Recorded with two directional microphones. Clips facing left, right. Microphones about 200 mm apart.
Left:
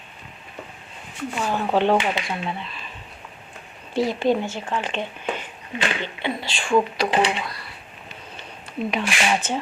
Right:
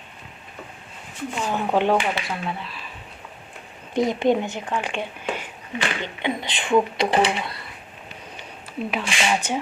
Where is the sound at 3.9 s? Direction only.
20° right (ahead or behind).